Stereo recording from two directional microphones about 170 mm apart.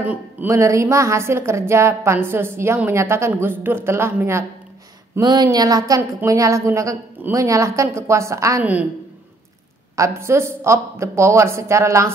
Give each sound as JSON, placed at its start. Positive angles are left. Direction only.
{"t": 0.0, "sound": "a woman's voice", "side_deg": -10}
{"t": 9.9, "sound": "speech", "side_deg": -15}